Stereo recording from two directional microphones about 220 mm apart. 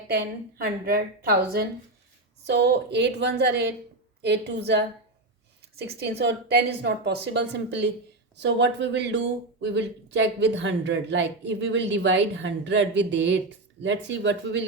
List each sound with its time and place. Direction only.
0.1 s speech: 45° right (ahead or behind)